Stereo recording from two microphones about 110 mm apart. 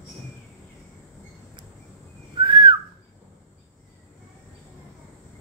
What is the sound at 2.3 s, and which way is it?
Whistling, 45° right (ahead or behind).